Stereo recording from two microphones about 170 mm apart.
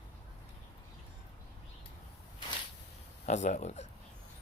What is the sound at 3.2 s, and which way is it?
Speech, 45° left (ahead or behind).